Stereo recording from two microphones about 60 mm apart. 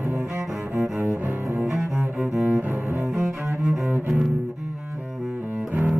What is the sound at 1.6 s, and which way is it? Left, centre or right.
Cello, centre.